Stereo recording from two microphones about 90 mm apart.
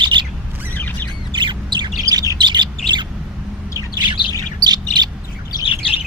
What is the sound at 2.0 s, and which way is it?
Bird, 40° right (ahead or behind).